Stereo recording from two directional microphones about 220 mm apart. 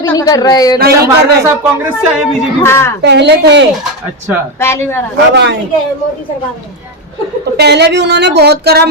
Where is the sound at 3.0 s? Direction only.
50° right (ahead or behind).